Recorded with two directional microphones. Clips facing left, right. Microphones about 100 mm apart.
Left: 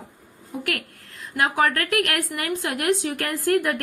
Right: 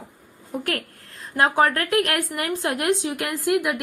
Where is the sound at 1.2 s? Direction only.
35° right (ahead or behind).